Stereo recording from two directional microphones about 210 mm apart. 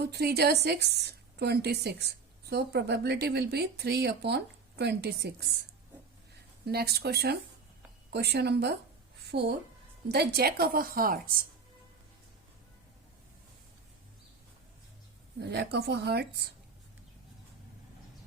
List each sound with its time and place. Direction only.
0.0 s a woman's voice: 50° right (ahead or behind)
6.7 s a woman's voice: 50° right (ahead or behind)
15.4 s a woman's voice: 50° right (ahead or behind)